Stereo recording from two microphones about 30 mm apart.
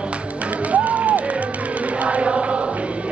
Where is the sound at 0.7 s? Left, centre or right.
Right.